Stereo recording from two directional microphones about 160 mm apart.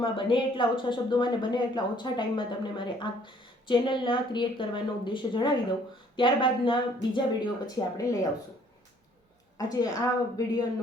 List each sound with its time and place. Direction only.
0.0 s a woman's voice: 30° left (ahead or behind)
9.6 s a woman's voice: 25° left (ahead or behind)